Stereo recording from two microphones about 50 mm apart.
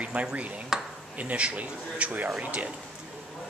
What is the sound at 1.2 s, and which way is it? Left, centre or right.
Speech, right.